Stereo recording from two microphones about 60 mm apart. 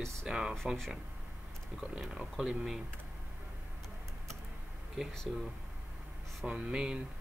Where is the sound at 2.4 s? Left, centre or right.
Centre.